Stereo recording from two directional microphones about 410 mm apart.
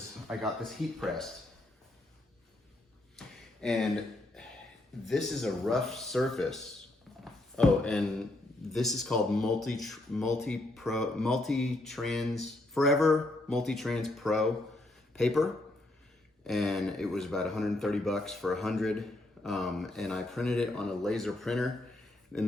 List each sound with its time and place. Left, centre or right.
0.3 s speech: centre
3.2 s a sound: centre
5.0 s speech: centre
16.5 s speech: centre